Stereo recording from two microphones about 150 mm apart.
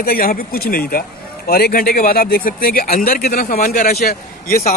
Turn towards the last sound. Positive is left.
turn(degrees=85)